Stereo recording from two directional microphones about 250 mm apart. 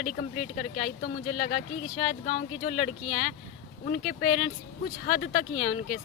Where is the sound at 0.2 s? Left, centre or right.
Left.